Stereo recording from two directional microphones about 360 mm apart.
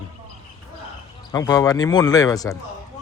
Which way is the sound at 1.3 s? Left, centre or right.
Centre.